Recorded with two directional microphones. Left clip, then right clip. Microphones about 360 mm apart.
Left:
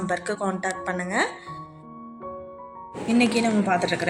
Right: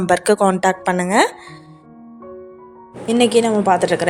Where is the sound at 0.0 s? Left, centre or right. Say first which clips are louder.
Right 12 dB; right.